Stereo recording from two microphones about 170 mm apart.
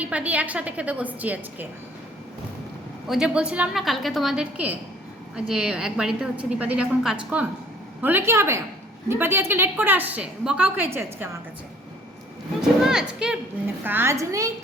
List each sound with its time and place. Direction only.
0.0 s a woman's voice: 10° right (ahead or behind)
3.1 s a woman's voice: 5° right (ahead or behind)
12.8 s a woman's voice: 5° right (ahead or behind)